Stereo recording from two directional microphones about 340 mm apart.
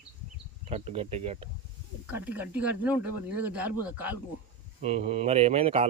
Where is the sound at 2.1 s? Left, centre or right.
Centre.